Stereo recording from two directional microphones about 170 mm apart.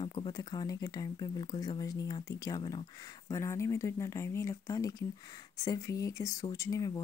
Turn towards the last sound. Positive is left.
turn(degrees=20)  # may be behind; listen again after turning